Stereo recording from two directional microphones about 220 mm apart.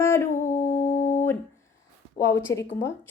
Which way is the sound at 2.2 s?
15° left (ahead or behind).